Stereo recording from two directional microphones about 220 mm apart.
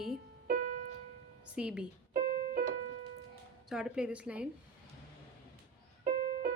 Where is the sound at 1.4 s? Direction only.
5° right (ahead or behind).